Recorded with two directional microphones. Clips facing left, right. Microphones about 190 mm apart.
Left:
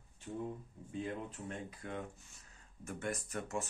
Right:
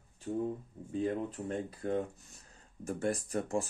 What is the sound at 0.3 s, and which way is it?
Speech, 40° right (ahead or behind).